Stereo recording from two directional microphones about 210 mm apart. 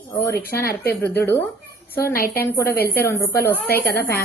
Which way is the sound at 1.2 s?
10° left (ahead or behind).